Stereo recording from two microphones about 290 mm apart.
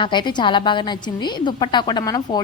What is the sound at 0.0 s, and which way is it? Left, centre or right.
A woman's voice, centre.